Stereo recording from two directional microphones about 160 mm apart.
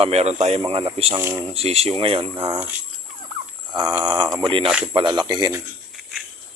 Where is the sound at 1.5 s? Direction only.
40° right (ahead or behind).